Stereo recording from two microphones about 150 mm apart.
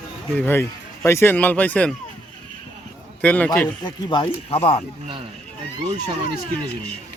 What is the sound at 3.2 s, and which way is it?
Speech, 10° left (ahead or behind).